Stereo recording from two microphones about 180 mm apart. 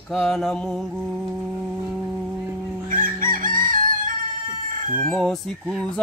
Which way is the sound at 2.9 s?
50° right (ahead or behind).